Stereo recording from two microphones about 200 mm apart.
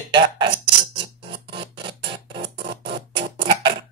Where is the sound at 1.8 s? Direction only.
25° right (ahead or behind).